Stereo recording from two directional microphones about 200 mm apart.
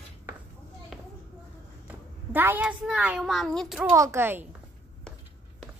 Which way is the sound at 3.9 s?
15° right (ahead or behind).